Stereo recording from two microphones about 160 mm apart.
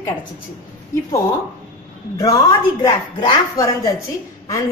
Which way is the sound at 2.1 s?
20° left (ahead or behind).